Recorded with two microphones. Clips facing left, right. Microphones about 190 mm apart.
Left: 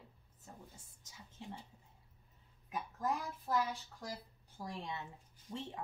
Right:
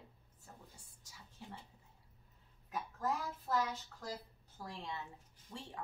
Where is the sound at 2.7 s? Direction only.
15° left (ahead or behind).